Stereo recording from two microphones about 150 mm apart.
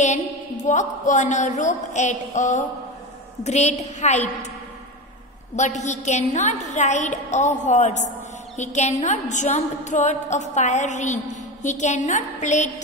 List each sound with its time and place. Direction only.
0.0 s a woman's voice: 55° left (ahead or behind)
5.6 s a woman's voice: 55° left (ahead or behind)